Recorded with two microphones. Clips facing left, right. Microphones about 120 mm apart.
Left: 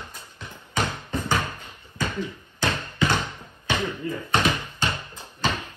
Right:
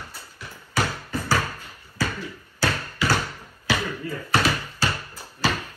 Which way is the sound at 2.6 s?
20° left (ahead or behind).